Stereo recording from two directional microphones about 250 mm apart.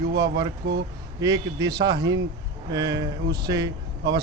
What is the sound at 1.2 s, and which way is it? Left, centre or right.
Speech, centre.